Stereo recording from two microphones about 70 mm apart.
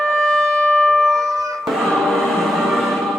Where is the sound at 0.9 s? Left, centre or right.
Centre.